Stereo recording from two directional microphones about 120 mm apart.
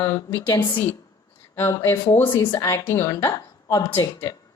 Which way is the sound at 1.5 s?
25° left (ahead or behind).